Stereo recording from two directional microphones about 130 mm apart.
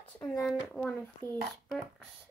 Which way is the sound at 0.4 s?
10° left (ahead or behind).